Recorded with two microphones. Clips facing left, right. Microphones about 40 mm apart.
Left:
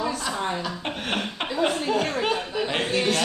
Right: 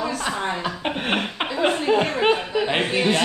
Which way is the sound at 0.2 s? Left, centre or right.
Right.